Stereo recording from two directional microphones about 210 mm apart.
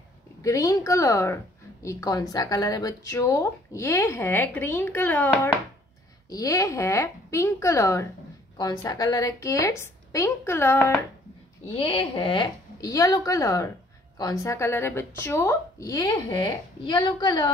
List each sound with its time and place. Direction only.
0.4 s a woman's voice: 15° left (ahead or behind)
11.6 s a woman's voice: 25° left (ahead or behind)